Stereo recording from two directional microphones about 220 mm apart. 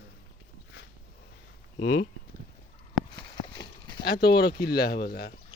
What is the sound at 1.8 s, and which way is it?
Speech, 55° left (ahead or behind).